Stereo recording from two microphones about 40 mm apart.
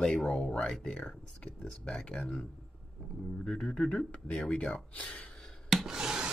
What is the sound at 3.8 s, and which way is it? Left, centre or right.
Speech, left.